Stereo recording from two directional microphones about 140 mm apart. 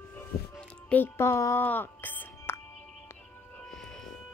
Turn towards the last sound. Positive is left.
turn(degrees=5)  # may be behind; listen again after turning